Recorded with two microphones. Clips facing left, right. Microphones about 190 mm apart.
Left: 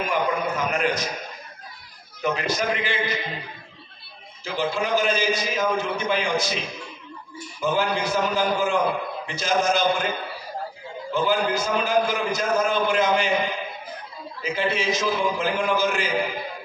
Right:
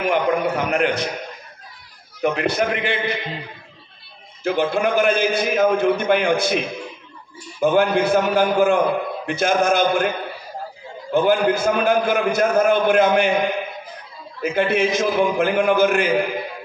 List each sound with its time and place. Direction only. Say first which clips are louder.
0.0 s a sound: right 5 dB; 65° right (ahead or behind)
2.2 s a man's voice: right 5 dB; 60° right (ahead or behind)
4.4 s a man's voice: right 6 dB; 55° right (ahead or behind)
11.1 s a man's voice: right 6 dB; 55° right (ahead or behind)